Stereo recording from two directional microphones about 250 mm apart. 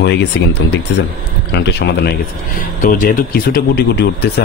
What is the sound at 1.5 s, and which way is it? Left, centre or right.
Speech, left.